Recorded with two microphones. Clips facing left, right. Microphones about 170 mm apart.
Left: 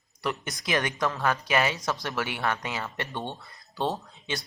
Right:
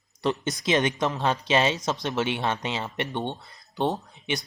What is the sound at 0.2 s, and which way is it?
Speech, 25° right (ahead or behind).